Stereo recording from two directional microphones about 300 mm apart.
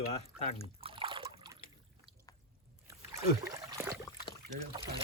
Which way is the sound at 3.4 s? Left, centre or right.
Centre.